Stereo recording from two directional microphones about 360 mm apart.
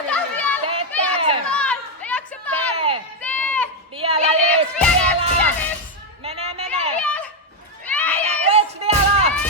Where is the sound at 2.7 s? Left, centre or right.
Centre.